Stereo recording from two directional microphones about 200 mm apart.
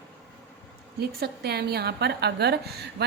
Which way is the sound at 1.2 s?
55° right (ahead or behind).